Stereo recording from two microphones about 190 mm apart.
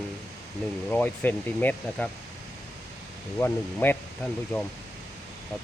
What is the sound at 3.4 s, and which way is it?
Speech, 10° left (ahead or behind).